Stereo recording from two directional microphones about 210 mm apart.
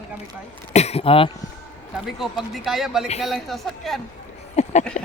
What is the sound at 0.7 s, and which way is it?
Speech, 30° left (ahead or behind).